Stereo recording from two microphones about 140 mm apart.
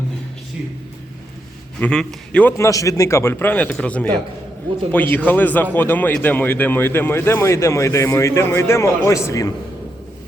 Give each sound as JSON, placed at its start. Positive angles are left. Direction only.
{"t": 1.8, "sound": "speech", "side_deg": 5}
{"t": 5.1, "sound": "speech", "side_deg": 10}